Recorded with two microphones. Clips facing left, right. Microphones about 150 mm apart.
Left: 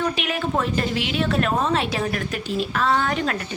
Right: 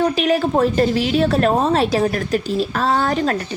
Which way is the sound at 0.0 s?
35° right (ahead or behind).